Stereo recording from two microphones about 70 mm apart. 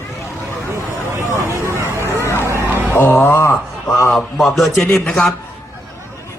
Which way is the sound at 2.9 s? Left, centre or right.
Left.